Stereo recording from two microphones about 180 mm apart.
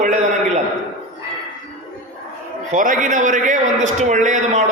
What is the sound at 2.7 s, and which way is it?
A man's voice, 45° right (ahead or behind).